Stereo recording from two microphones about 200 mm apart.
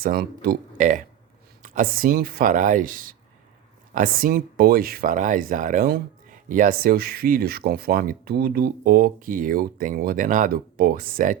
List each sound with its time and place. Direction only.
0.0 s speech: 45° right (ahead or behind)